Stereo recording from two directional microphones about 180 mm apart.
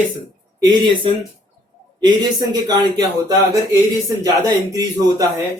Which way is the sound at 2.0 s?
20° right (ahead or behind).